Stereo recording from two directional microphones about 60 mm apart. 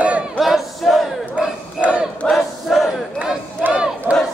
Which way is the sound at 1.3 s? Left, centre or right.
Centre.